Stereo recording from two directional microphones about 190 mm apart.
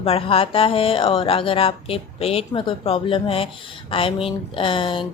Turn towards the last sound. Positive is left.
turn(degrees=25)  # may be behind; listen again after turning